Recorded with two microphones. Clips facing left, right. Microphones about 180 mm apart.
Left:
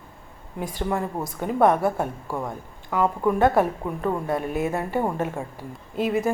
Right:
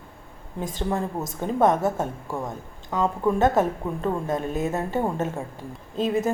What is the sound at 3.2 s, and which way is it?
A woman's voice, 20° right (ahead or behind).